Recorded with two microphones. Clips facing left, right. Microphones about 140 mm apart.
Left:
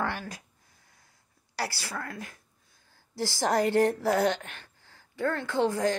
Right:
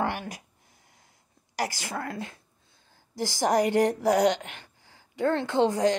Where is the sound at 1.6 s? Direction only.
15° right (ahead or behind).